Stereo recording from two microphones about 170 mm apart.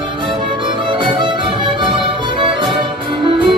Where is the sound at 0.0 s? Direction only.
30° right (ahead or behind).